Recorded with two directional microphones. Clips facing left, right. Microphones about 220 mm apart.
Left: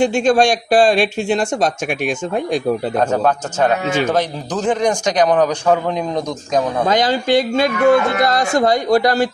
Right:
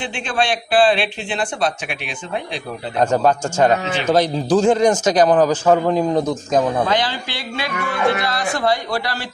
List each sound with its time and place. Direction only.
0.0 s speech: 45° left (ahead or behind)
4.1 s a man's voice: 10° right (ahead or behind)
6.9 s speech: 45° left (ahead or behind)